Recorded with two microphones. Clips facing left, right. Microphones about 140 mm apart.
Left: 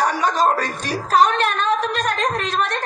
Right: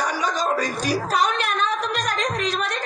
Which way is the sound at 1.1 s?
35° left (ahead or behind).